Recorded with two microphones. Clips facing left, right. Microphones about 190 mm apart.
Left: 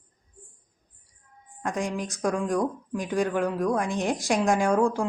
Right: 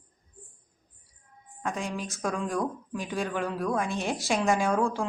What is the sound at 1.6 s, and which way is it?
A woman's voice, 15° left (ahead or behind).